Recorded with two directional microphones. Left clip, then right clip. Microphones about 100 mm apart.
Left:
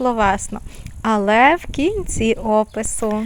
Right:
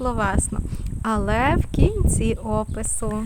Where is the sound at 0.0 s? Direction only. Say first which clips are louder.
Left 7 dB; 35° left (ahead or behind).